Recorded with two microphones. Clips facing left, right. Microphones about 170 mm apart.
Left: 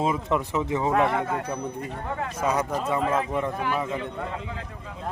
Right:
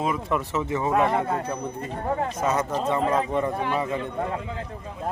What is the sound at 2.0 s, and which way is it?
Speech, 35° right (ahead or behind).